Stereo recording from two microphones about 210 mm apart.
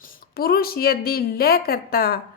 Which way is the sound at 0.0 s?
45° left (ahead or behind).